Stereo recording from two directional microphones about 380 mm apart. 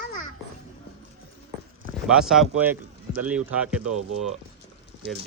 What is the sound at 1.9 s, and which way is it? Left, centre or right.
Speech, centre.